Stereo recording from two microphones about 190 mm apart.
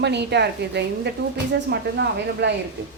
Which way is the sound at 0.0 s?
65° right (ahead or behind).